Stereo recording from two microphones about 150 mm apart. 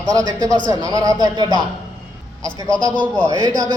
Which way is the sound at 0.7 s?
25° right (ahead or behind).